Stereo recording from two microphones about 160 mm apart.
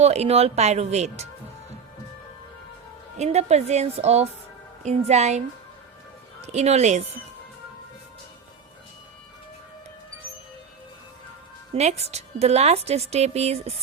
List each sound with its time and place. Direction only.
0.0 s speech: 40° right (ahead or behind)
3.2 s speech: 45° right (ahead or behind)
6.4 s speech: 45° right (ahead or behind)
11.7 s a woman's voice: 40° right (ahead or behind)